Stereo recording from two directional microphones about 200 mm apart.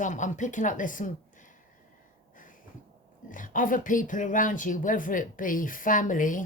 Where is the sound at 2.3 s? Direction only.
40° left (ahead or behind).